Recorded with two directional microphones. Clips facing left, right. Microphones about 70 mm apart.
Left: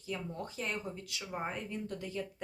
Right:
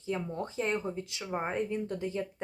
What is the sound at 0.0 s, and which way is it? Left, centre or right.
Speech, right.